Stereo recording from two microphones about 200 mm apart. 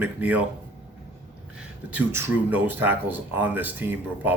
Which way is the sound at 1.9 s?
10° right (ahead or behind).